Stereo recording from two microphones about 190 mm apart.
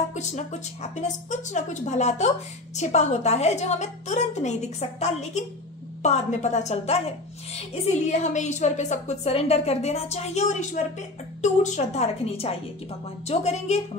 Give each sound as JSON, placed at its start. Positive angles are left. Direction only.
{"t": 0.1, "sound": "a woman's voice", "side_deg": 40}